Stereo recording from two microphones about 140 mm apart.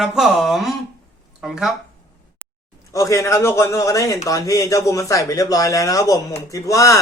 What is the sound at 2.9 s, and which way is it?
A man's voice, 20° left (ahead or behind).